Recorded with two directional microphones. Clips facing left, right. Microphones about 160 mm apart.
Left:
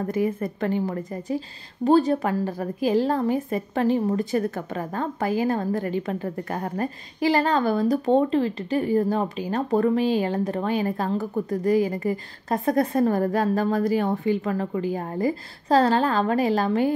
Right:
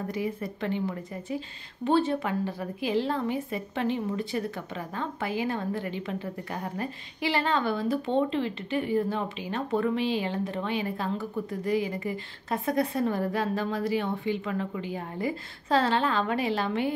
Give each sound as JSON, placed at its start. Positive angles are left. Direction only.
{"t": 0.1, "sound": "a woman's voice", "side_deg": 50}